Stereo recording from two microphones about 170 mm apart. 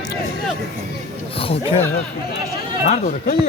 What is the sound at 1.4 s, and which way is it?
Speech, 35° left (ahead or behind).